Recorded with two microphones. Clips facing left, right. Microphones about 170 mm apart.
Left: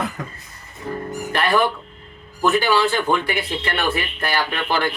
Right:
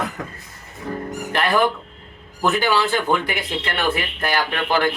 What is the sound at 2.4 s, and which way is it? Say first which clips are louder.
Speech: left 2 dB; 15° right (ahead or behind).